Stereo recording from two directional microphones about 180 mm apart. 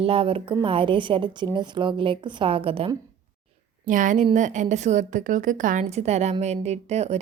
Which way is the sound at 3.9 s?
45° right (ahead or behind).